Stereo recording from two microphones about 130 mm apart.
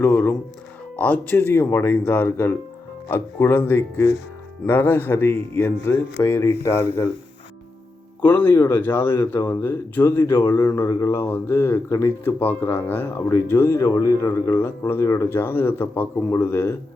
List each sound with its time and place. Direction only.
0.9 s speech: 10° left (ahead or behind)
8.2 s speech: 15° left (ahead or behind)